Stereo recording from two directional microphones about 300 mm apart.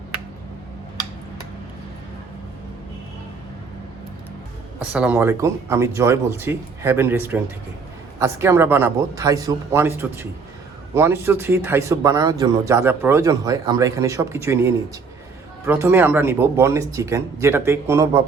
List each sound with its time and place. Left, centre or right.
4.8 s speech: centre